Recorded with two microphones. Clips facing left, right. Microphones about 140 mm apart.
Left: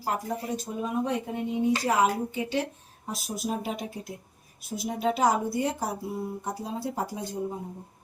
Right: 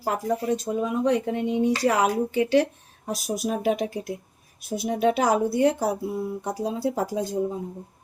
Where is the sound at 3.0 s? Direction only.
75° right (ahead or behind).